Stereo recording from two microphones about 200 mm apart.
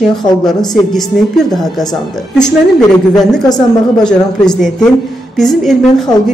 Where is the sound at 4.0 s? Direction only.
5° left (ahead or behind).